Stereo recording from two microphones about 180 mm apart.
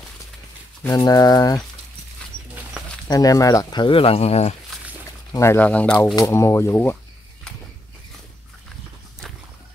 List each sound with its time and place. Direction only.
0.8 s speech: 20° left (ahead or behind)
3.1 s speech: 20° left (ahead or behind); by 4.6 s 35° left (ahead or behind)
5.3 s speech: 15° left (ahead or behind)
6.1 s speech: 15° left (ahead or behind)